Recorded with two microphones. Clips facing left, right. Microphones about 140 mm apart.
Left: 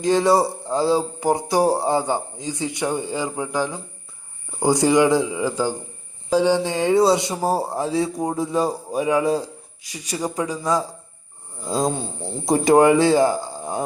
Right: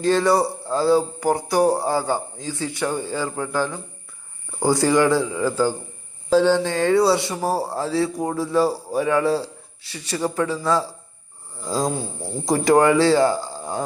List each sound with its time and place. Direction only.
0.0 s speech: 15° left (ahead or behind)